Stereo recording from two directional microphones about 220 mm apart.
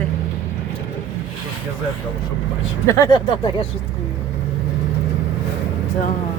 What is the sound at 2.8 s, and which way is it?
Speech, 15° left (ahead or behind).